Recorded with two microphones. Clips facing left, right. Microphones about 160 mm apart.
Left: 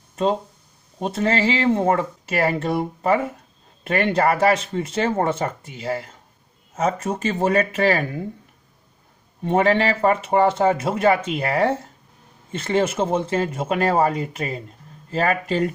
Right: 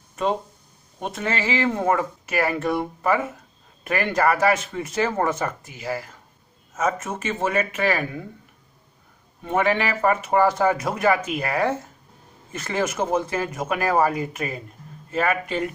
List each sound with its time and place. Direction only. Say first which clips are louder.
0.9 s speech: left 5 dB; 35° left (ahead or behind)
9.4 s speech: left 4 dB; 30° left (ahead or behind)